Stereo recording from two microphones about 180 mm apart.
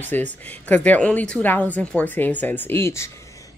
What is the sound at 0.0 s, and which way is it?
Speech, 10° left (ahead or behind).